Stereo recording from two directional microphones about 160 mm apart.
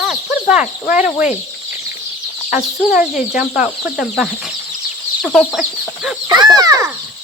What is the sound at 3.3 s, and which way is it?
Speech, 5° right (ahead or behind).